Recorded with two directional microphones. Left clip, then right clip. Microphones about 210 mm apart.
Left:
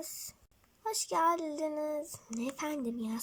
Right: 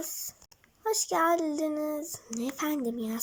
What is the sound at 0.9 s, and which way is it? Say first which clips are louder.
A child's voice: right 4 dB; 25° left (ahead or behind).